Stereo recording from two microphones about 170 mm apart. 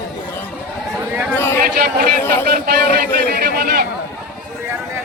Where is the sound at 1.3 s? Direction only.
15° left (ahead or behind).